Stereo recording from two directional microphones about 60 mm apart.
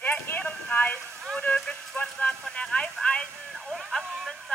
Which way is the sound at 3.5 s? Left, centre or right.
Centre.